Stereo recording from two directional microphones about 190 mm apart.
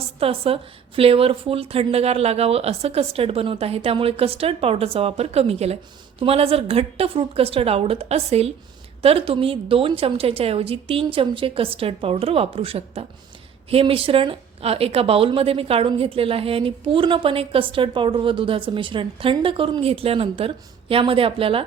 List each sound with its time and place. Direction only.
0.2 s a woman's voice: 30° right (ahead or behind)